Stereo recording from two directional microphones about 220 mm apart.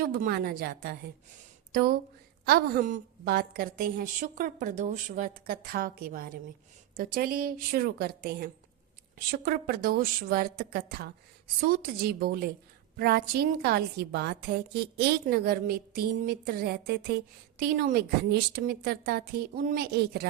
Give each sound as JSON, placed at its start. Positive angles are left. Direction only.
{"t": 0.0, "sound": "a woman's voice", "side_deg": -45}
{"t": 2.5, "sound": "a woman's voice", "side_deg": -40}